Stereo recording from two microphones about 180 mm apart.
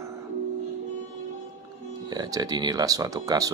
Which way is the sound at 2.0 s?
20° right (ahead or behind).